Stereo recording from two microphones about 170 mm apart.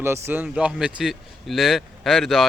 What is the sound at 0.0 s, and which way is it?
A man's voice, 15° right (ahead or behind).